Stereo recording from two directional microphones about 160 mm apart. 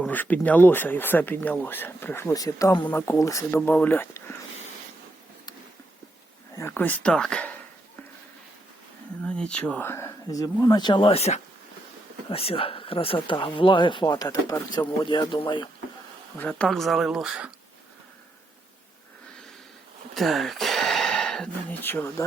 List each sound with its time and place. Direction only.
0.0 s speech: 10° left (ahead or behind)
6.6 s speech: 15° left (ahead or behind)
9.2 s speech: 5° left (ahead or behind); by 15.7 s 30° left (ahead or behind)
16.4 s speech: 10° left (ahead or behind)
20.1 s speech: centre (ahead or behind)